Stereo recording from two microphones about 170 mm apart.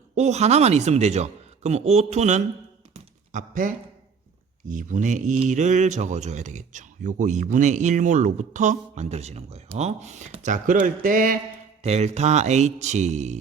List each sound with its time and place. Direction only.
0.2 s a man's voice: 40° right (ahead or behind)
2.9 s a sound: 50° right (ahead or behind)
4.7 s speech: 50° right (ahead or behind)
11.8 s speech: 40° right (ahead or behind)